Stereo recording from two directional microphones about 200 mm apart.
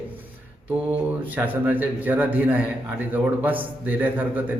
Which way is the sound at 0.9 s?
10° right (ahead or behind).